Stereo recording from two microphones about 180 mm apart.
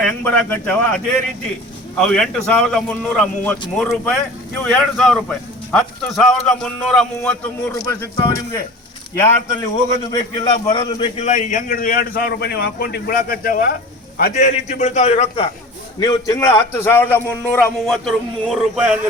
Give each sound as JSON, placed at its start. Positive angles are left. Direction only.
{"t": 0.0, "sound": "a man's voice", "side_deg": 10}
{"t": 7.7, "sound": "a man's voice", "side_deg": 15}
{"t": 10.0, "sound": "a man's voice", "side_deg": 20}
{"t": 11.2, "sound": "a man's voice", "side_deg": 40}
{"t": 14.2, "sound": "a man's voice", "side_deg": 40}
{"t": 16.0, "sound": "a man's voice", "side_deg": 20}